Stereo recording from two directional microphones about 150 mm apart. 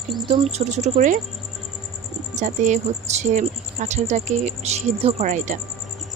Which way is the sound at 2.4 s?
55° right (ahead or behind).